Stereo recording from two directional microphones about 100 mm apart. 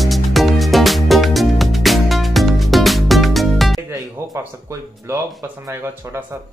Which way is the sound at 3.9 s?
35° right (ahead or behind).